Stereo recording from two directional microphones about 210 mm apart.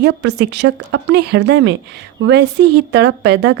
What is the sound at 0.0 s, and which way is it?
A woman's voice, 55° right (ahead or behind).